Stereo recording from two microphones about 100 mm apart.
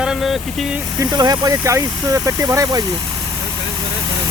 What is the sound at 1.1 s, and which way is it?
Speech, 40° right (ahead or behind).